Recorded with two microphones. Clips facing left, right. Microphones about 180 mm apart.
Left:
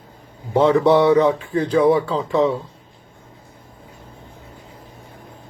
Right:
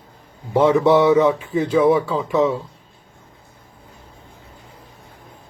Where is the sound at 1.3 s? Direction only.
15° right (ahead or behind).